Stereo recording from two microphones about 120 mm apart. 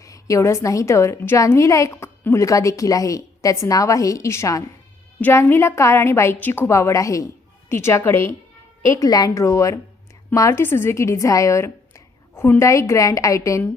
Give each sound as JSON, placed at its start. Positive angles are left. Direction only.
{"t": 0.0, "sound": "a woman's voice", "side_deg": 25}